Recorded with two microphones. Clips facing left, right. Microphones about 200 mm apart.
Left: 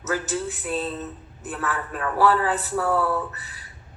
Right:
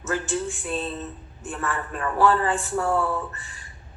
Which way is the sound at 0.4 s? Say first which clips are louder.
Left 1 dB; 5° left (ahead or behind).